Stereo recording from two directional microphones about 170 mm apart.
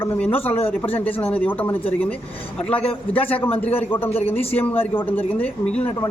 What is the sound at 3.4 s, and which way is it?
Speech, 35° left (ahead or behind).